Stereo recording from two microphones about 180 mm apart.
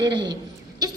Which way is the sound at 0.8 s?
20° right (ahead or behind).